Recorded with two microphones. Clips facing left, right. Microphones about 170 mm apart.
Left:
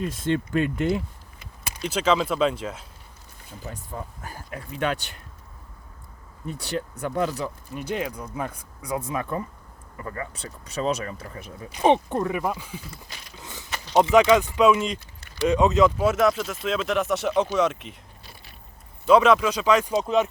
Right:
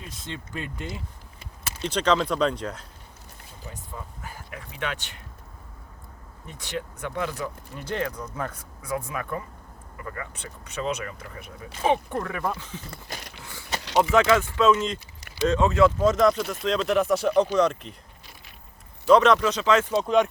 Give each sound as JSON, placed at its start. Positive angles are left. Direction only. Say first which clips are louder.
{"t": 0.0, "sound": "speech", "louder": "left 13 dB", "side_deg": 55}
{"t": 1.8, "sound": "speech", "louder": "left 1 dB", "side_deg": 5}
{"t": 3.7, "sound": "speech", "louder": "left 4 dB", "side_deg": 45}
{"t": 6.5, "sound": "speech", "louder": "left 4 dB", "side_deg": 40}
{"t": 7.8, "sound": "speech", "louder": "left 1 dB", "side_deg": 15}
{"t": 12.9, "sound": "a sound", "louder": "right 4 dB", "side_deg": -60}
{"t": 13.4, "sound": "mechanisms", "louder": "left 2 dB", "side_deg": 20}
{"t": 13.9, "sound": "speech", "louder": "left 3 dB", "side_deg": 20}
{"t": 19.0, "sound": "speech", "louder": "even", "side_deg": 5}